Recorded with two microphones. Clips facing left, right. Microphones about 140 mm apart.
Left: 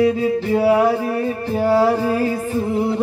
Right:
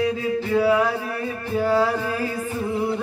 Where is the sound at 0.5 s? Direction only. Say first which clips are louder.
Left 4 dB; 35° left (ahead or behind).